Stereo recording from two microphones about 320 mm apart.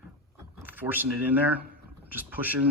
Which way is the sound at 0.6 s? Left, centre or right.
Centre.